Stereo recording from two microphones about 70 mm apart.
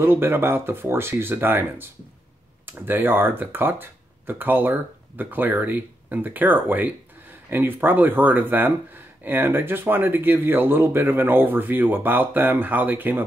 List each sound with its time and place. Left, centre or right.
0.0 s speech: right